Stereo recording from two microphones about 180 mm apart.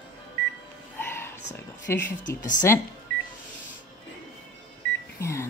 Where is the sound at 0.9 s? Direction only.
10° left (ahead or behind).